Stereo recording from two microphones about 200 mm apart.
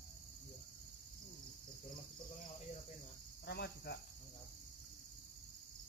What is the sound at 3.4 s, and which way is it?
Cricket, 55° left (ahead or behind).